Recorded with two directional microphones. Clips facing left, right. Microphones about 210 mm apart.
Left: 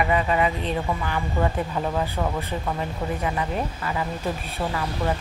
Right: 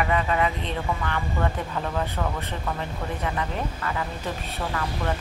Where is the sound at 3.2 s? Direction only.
15° left (ahead or behind).